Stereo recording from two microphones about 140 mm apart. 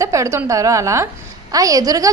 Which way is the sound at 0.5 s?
25° right (ahead or behind).